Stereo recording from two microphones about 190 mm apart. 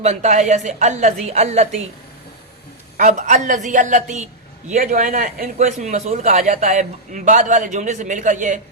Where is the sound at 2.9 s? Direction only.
40° right (ahead or behind).